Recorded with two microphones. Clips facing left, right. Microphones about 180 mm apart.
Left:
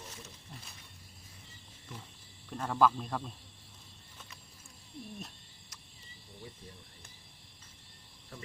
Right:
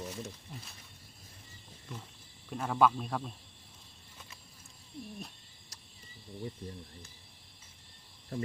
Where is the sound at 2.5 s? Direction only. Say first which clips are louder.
Right 1 dB; 5° right (ahead or behind).